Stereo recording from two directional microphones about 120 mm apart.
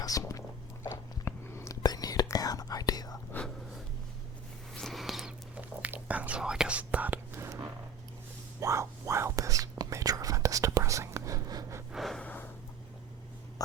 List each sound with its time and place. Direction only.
0.0 s a sound: 30° left (ahead or behind)
0.9 s whispering: 20° left (ahead or behind)
4.7 s a sound: 5° left (ahead or behind)
5.8 s whispering: 10° right (ahead or behind)
8.6 s whispering: 25° right (ahead or behind)
11.9 s gasp: centre (ahead or behind)
12.2 s snort: 15° left (ahead or behind)